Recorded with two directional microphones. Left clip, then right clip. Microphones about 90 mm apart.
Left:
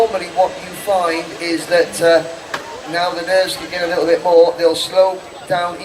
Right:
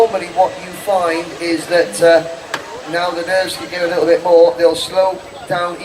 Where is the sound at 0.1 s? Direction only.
25° left (ahead or behind).